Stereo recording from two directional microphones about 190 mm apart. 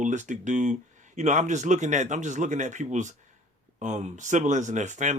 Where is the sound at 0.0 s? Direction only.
40° right (ahead or behind).